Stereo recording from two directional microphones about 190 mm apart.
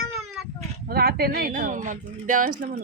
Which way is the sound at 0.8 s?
55° right (ahead or behind).